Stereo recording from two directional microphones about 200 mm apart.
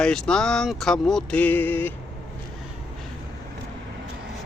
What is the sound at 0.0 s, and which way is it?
Speech, 5° left (ahead or behind).